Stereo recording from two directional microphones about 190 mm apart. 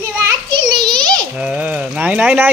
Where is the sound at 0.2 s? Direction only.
25° right (ahead or behind).